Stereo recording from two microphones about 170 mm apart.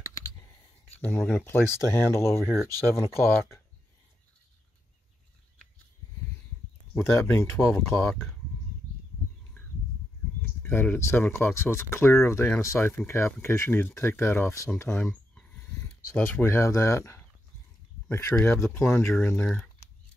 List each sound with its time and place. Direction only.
0.9 s speech: 10° left (ahead or behind)
2.4 s speech: 5° right (ahead or behind)
2.9 s speech: 15° left (ahead or behind)
6.9 s speech: 15° left (ahead or behind)
9.6 s a sound: 10° left (ahead or behind)
10.6 s speech: 10° left (ahead or behind)
15.0 s a sound: 5° left (ahead or behind)
16.2 s speech: 10° left (ahead or behind)